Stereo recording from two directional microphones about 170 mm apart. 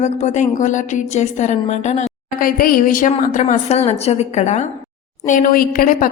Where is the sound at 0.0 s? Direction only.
45° left (ahead or behind).